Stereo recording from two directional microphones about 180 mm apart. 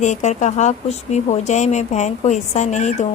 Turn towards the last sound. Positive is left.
turn(degrees=40)  # may be behind; listen again after turning